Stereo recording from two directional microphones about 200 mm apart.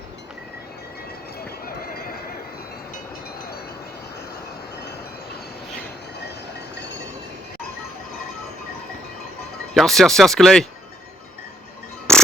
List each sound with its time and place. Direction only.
1.6 s neigh: 50° left (ahead or behind)
9.7 s speech: centre (ahead or behind)
12.1 s music: 5° left (ahead or behind)